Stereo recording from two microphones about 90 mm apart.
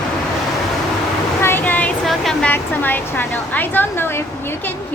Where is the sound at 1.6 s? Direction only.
15° left (ahead or behind).